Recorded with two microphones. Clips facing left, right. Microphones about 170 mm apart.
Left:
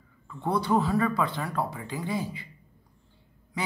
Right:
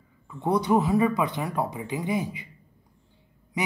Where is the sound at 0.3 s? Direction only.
20° right (ahead or behind).